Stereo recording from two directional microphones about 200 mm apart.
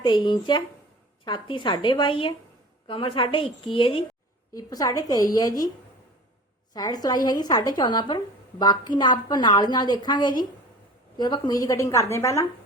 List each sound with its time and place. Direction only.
0.0 s a woman's voice: 25° left (ahead or behind)
6.7 s a woman's voice: 20° left (ahead or behind)